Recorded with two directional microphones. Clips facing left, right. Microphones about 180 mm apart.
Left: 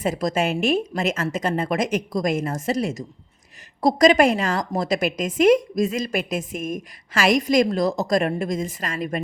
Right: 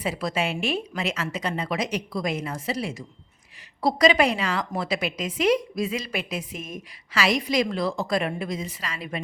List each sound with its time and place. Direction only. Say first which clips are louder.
0.0 s a woman's voice: left 5 dB; 45° left (ahead or behind)